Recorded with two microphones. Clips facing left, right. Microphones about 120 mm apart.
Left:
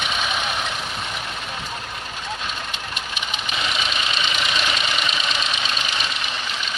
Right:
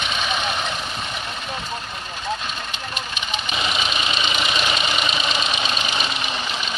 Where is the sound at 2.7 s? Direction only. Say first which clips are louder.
Right 1 dB; 5° left (ahead or behind).